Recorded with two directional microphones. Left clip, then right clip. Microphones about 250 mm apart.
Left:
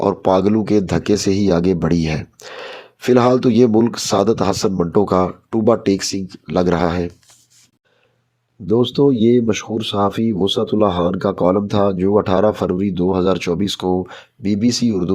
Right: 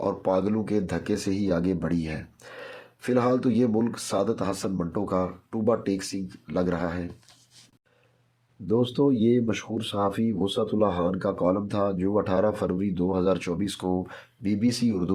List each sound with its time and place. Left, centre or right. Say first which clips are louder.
0.0 s speech: left 10 dB; left
8.6 s speech: left 9 dB; left